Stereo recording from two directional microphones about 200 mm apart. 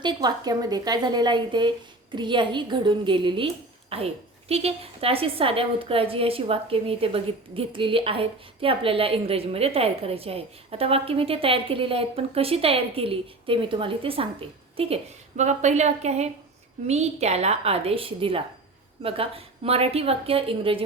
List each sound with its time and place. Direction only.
0.0 s a woman's voice: 20° right (ahead or behind)